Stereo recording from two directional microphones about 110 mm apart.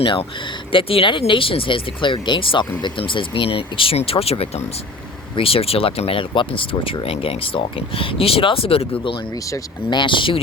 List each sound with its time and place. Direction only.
0.0 s speech: 50° left (ahead or behind)
9.5 s speech: 45° left (ahead or behind)